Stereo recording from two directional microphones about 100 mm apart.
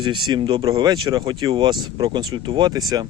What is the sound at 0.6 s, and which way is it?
Speech, 40° right (ahead or behind).